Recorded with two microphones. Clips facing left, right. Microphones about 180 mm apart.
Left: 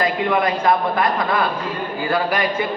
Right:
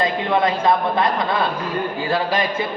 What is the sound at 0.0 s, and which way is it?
A man's voice, 25° right (ahead or behind).